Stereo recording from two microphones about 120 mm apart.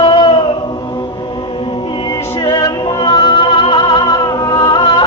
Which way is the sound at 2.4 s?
35° left (ahead or behind).